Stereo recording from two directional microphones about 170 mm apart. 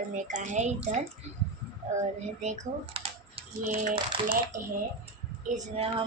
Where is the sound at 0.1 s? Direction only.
50° right (ahead or behind).